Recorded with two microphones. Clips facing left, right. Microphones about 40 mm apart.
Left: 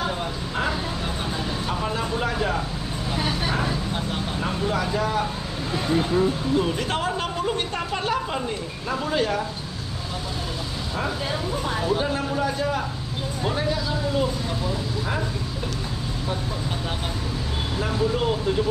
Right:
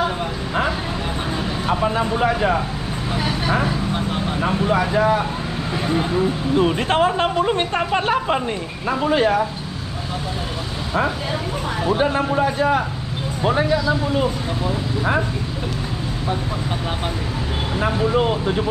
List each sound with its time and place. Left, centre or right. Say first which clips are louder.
1.7 s speech: right 9 dB; right
6.5 s speech: right 5 dB; right
12.0 s speech: right 6 dB; right
17.7 s speech: right 5 dB; right